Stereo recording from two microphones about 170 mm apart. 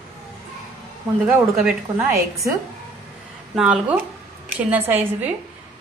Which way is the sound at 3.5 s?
5° right (ahead or behind).